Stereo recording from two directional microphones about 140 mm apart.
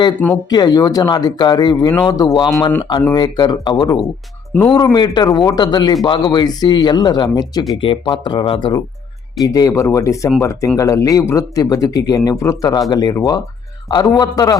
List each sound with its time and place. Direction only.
0.5 s speech: 30° left (ahead or behind)
9.4 s speech: 25° left (ahead or behind)